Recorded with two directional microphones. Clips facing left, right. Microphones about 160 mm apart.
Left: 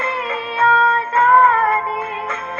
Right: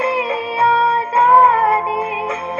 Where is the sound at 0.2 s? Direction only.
30° right (ahead or behind).